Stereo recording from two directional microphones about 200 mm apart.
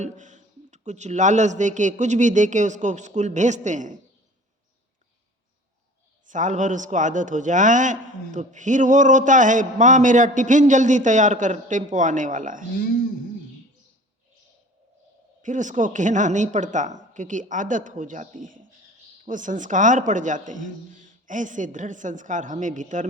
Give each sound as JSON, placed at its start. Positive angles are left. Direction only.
{"t": 0.0, "sound": "a man's voice", "side_deg": -35}
{"t": 6.2, "sound": "a man's voice", "side_deg": -40}
{"t": 12.8, "sound": "speech", "side_deg": 45}
{"t": 15.4, "sound": "a man's voice", "side_deg": -40}